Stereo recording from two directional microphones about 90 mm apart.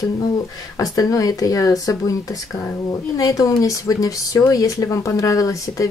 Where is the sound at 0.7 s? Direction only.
40° left (ahead or behind).